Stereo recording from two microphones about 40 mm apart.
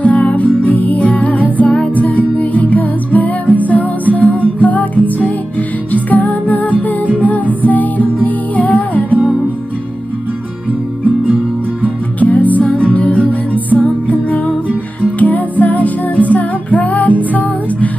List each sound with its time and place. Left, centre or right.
0.0 s music: left
9.1 s music: right
12.2 s music: left